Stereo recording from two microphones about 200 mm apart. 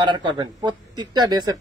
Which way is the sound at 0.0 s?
25° right (ahead or behind).